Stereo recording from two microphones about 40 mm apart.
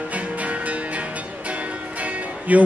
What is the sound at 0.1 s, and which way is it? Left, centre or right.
Music, right.